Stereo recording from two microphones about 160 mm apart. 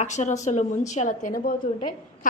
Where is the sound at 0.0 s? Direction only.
50° left (ahead or behind).